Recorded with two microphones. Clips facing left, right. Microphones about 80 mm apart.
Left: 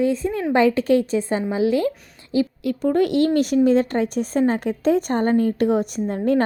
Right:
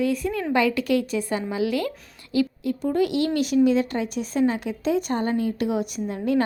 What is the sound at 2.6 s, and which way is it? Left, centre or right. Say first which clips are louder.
A woman's voice: left 4 dB; left.